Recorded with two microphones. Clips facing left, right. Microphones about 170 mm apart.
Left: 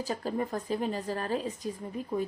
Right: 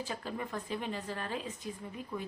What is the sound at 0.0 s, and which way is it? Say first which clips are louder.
Speech: left 7 dB; 40° left (ahead or behind).